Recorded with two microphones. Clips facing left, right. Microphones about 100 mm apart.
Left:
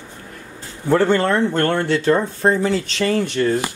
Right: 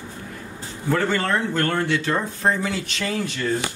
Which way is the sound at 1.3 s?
30° left (ahead or behind).